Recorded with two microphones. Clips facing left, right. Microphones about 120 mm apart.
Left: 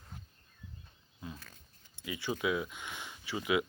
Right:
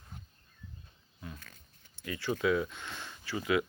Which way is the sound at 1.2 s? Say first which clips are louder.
Left 1 dB; 10° left (ahead or behind).